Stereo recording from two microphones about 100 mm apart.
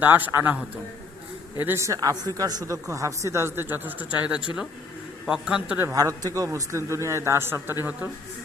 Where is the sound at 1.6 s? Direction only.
30° right (ahead or behind); by 5.8 s 10° right (ahead or behind).